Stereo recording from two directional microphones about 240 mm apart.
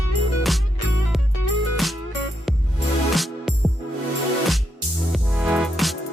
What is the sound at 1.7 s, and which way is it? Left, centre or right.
Music, centre.